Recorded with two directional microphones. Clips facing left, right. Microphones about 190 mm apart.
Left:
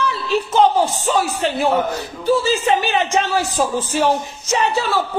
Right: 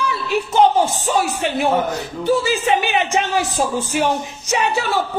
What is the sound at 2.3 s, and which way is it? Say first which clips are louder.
A man's voice: left 1 dB; 15° right (ahead or behind).